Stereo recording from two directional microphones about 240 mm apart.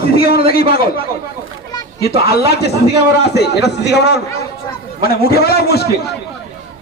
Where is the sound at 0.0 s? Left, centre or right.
Left.